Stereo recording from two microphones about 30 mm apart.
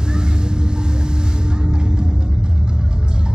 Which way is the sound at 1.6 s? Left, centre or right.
Right.